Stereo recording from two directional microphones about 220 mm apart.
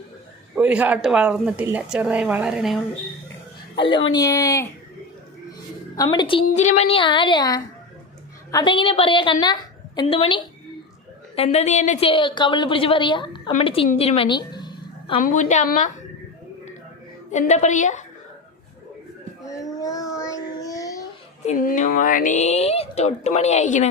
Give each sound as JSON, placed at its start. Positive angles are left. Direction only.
{"t": 0.5, "sound": "a woman's voice", "side_deg": -5}
{"t": 3.9, "sound": "speech", "side_deg": 20}
{"t": 6.0, "sound": "a woman's voice", "side_deg": 20}
{"t": 6.4, "sound": "a woman's voice", "side_deg": 30}
{"t": 15.2, "sound": "a woman's voice", "side_deg": 35}
{"t": 17.3, "sound": "a woman's voice", "side_deg": 30}
{"t": 19.5, "sound": "child singing", "side_deg": 15}
{"t": 21.4, "sound": "a woman's voice", "side_deg": 35}